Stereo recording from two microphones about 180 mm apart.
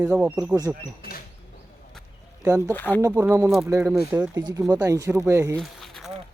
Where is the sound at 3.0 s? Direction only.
15° right (ahead or behind).